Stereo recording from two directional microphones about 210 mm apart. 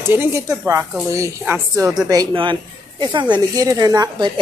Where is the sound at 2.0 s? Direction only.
20° right (ahead or behind).